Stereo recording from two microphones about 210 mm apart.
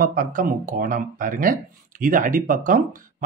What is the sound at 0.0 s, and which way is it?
Speech, 40° right (ahead or behind).